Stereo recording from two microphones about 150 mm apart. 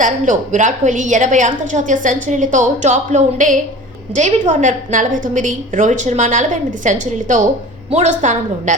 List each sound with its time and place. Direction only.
0.0 s a woman's voice: 55° right (ahead or behind)